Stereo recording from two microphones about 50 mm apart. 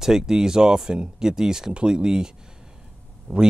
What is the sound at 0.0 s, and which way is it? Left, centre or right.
Speech, centre.